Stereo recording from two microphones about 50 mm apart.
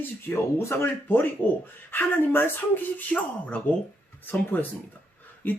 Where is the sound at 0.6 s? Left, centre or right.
Left.